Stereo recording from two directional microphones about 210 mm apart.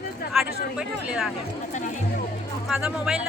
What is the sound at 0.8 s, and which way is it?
Speech, 5° right (ahead or behind).